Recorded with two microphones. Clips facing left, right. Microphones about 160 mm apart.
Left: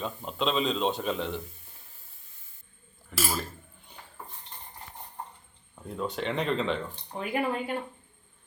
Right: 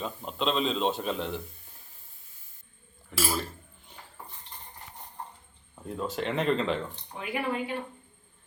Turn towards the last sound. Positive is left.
turn(degrees=45)  # may be behind; listen again after turning